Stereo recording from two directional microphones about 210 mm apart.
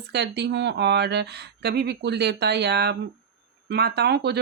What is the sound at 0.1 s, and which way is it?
Speech, 50° right (ahead or behind).